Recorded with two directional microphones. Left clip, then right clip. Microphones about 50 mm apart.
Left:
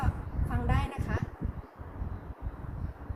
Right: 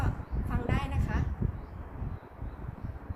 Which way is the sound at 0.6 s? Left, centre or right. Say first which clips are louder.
Left 1 dB; right.